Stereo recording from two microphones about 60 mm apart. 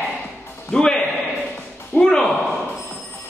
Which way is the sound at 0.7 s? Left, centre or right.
Centre.